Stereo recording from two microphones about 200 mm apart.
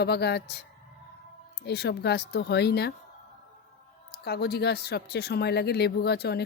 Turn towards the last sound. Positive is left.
turn(degrees=55)  # may be behind; listen again after turning